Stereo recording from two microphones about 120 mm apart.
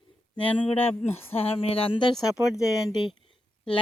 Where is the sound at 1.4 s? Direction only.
55° left (ahead or behind).